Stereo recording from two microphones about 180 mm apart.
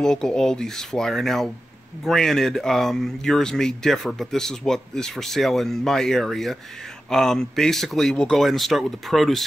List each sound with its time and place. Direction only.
0.0 s speech: 5° left (ahead or behind)